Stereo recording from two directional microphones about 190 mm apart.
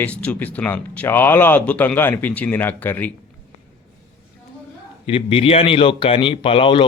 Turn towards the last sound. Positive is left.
turn(degrees=30)  # may be behind; listen again after turning